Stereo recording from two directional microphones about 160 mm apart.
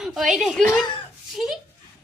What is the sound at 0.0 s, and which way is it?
A woman's voice, 5° right (ahead or behind).